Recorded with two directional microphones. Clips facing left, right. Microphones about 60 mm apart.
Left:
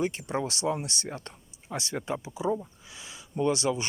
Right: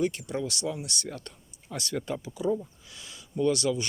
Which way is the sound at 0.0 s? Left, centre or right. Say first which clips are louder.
Even; left.